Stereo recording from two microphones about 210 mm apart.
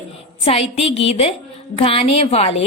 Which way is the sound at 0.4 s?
30° left (ahead or behind).